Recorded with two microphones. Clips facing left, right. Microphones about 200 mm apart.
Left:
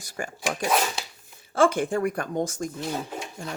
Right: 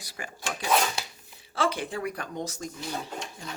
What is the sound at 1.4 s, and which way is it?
Speech, 50° left (ahead or behind).